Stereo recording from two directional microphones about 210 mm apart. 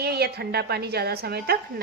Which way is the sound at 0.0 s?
50° right (ahead or behind).